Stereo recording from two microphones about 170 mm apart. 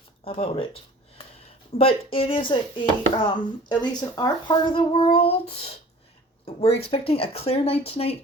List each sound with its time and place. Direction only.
0.3 s speech: 30° left (ahead or behind)
1.8 s speech: 35° left (ahead or behind)